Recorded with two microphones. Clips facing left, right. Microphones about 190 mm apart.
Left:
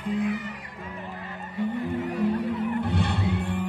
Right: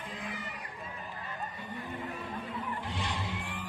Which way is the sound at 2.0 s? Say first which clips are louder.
Left 14 dB; 80° left.